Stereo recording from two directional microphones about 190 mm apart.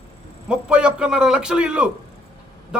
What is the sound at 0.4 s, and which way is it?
A man's voice, 5° right (ahead or behind).